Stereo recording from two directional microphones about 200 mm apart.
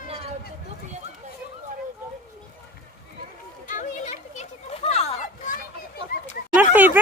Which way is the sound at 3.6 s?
40° left (ahead or behind).